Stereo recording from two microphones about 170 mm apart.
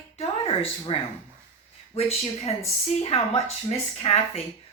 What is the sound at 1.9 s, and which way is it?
A woman's voice, 35° left (ahead or behind).